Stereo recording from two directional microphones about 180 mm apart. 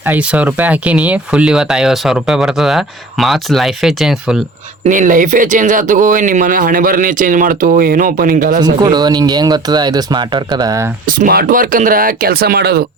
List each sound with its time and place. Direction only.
0.0 s speech: 10° right (ahead or behind)
4.8 s speech: 45° right (ahead or behind)
8.6 s speech: 20° right (ahead or behind)
11.0 s speech: 55° right (ahead or behind)